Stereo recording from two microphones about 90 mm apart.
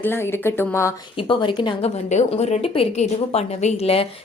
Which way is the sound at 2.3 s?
90° left.